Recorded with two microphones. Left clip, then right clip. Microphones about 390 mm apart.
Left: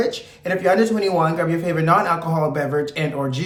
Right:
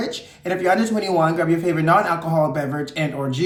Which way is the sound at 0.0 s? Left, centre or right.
Centre.